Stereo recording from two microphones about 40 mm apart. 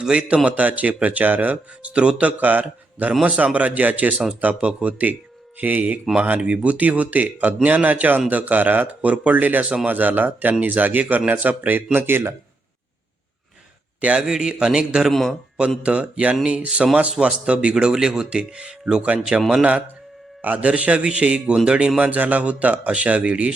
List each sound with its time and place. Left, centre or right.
0.0 s speech: right
0.4 s speech: right
1.9 s speech: right
2.4 s speech: right
14.2 s speech: centre
15.1 s speech: centre
15.8 s speech: right
20.4 s speech: right